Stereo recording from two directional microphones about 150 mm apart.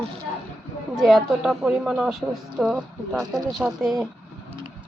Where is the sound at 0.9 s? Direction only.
5° right (ahead or behind).